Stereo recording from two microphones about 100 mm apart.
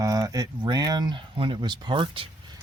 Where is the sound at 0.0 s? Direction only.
35° right (ahead or behind); by 2.3 s 60° right (ahead or behind).